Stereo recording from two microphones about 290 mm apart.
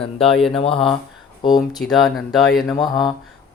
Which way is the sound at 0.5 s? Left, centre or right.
Centre.